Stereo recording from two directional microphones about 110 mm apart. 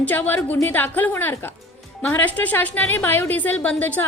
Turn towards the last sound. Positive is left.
turn(degrees=15)  # may be behind; listen again after turning